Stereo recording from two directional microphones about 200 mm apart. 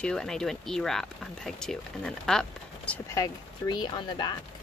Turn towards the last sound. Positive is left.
turn(degrees=20)  # may be behind; listen again after turning